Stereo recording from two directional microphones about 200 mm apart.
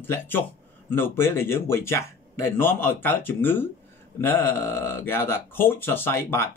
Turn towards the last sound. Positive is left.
turn(degrees=10)  # may be behind; listen again after turning